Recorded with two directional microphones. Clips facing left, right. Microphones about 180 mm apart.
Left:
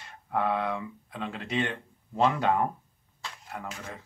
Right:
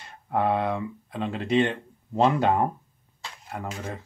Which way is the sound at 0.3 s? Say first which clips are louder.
Right 4 dB; 30° right (ahead or behind).